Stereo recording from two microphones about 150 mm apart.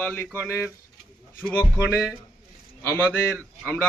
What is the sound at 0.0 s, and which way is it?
Speech, 10° left (ahead or behind).